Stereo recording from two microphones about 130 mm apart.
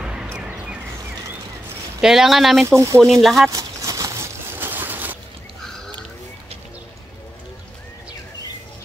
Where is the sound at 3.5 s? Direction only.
25° right (ahead or behind).